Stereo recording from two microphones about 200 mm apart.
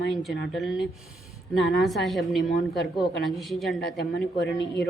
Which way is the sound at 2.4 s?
40° left (ahead or behind).